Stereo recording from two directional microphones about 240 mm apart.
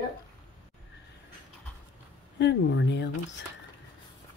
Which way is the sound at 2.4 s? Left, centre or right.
Left.